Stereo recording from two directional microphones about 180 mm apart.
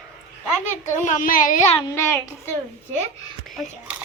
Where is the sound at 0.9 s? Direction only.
45° left (ahead or behind).